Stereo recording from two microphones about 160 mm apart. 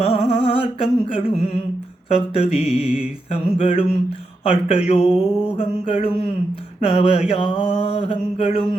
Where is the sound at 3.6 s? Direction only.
35° left (ahead or behind).